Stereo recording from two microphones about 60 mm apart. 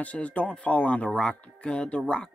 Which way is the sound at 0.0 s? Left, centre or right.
Left.